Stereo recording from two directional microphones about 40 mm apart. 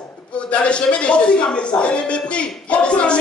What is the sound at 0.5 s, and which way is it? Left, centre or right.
A man's voice, left.